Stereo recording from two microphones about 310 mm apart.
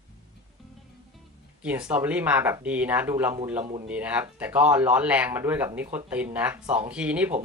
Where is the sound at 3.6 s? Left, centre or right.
Centre.